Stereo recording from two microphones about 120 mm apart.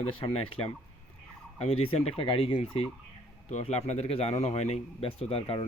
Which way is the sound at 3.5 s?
65° left (ahead or behind).